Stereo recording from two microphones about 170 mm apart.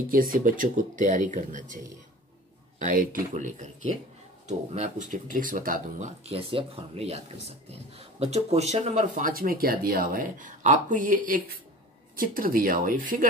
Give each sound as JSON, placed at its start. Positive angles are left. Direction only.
{"t": 0.1, "sound": "speech", "side_deg": -55}
{"t": 2.8, "sound": "speech", "side_deg": -55}